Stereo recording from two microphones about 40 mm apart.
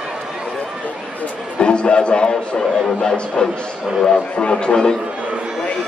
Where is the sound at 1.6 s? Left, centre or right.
Left.